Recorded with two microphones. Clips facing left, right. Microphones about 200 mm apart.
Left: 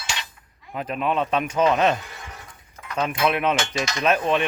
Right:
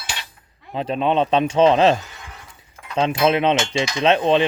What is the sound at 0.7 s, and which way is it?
Cutlery, 30° right (ahead or behind).